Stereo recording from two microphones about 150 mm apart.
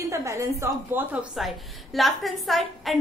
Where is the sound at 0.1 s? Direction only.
20° right (ahead or behind).